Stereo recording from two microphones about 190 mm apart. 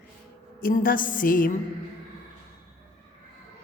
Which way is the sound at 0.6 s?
45° left (ahead or behind).